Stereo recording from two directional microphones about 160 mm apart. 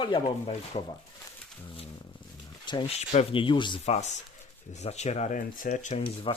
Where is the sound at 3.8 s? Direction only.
45° left (ahead or behind).